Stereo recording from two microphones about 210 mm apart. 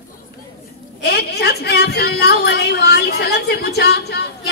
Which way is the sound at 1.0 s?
50° left (ahead or behind).